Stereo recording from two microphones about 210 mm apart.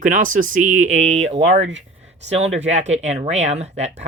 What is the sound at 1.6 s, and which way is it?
Speech, 60° right (ahead or behind).